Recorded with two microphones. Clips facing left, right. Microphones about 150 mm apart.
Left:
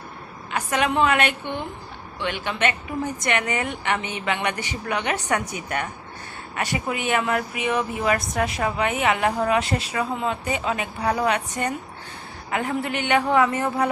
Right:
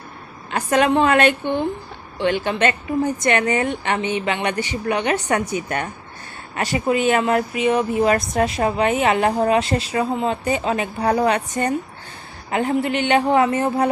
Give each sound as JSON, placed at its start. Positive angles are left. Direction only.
{"t": 0.5, "sound": "speech", "side_deg": -35}